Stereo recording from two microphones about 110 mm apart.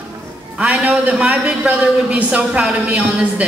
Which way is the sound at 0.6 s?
10° right (ahead or behind).